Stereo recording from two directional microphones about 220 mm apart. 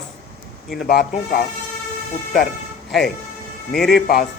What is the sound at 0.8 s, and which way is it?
Speech, 40° left (ahead or behind).